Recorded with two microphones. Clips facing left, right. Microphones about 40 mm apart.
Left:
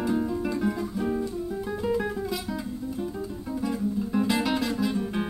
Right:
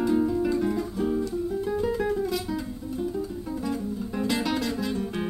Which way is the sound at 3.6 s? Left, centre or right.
Centre.